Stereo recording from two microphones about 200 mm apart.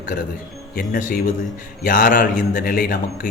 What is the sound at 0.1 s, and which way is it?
A man's voice, 45° left (ahead or behind).